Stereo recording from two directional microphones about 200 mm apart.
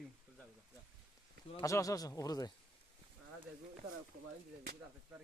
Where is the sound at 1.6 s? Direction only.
15° left (ahead or behind).